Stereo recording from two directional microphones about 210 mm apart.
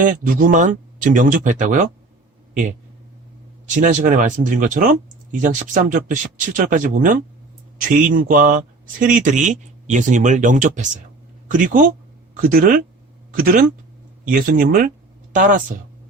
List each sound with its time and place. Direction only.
0.0 s speech: 40° right (ahead or behind)
3.7 s speech: 35° right (ahead or behind)